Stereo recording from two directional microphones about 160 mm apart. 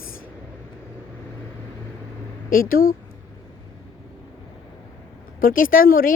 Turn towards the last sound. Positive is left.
turn(degrees=60)  # may be behind; listen again after turning